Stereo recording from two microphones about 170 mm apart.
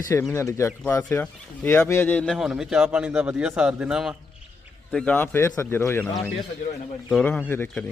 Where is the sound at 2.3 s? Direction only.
5° right (ahead or behind).